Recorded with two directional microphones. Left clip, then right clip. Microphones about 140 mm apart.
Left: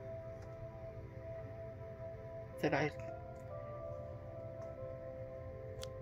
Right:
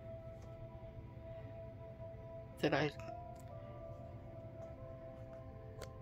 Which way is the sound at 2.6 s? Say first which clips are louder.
Even; 40° right (ahead or behind).